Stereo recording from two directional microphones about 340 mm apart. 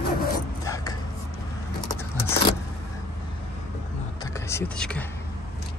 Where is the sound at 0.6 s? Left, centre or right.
Centre.